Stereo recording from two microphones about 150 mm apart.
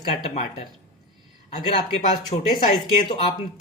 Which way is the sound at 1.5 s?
50° left (ahead or behind).